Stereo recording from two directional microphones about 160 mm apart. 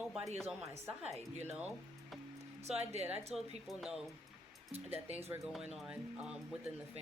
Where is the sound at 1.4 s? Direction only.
10° right (ahead or behind).